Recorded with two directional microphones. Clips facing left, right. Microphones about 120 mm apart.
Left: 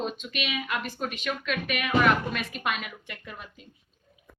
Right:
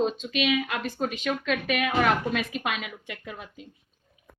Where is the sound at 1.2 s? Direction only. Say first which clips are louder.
Right 3 dB; 90° right.